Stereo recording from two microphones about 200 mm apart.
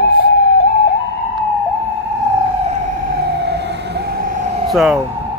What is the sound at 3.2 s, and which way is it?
Emergency vehicle, 55° right (ahead or behind).